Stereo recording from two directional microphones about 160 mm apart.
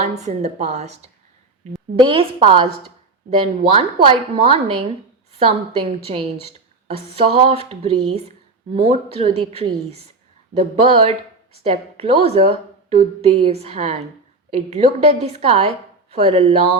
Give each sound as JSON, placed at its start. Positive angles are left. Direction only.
{"t": 0.0, "sound": "a woman's voice", "side_deg": -45}
{"t": 2.0, "sound": "a woman's voice", "side_deg": -30}